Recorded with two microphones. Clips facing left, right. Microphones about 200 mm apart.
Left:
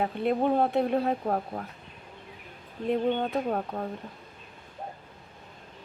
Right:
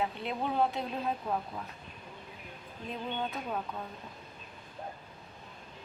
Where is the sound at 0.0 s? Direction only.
50° left (ahead or behind).